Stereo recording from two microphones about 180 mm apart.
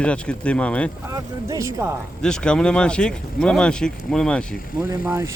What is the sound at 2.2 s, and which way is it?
Speech, 5° left (ahead or behind).